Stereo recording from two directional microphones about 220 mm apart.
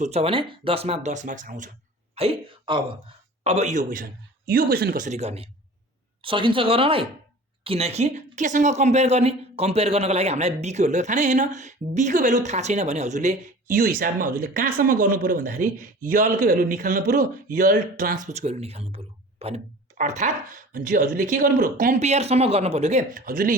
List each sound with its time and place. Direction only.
0.0 s speech: 30° right (ahead or behind)
3.8 s speech: 45° right (ahead or behind)